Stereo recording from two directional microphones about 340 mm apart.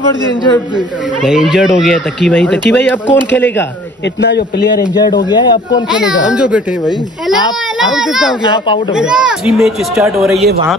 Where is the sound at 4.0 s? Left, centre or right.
Left.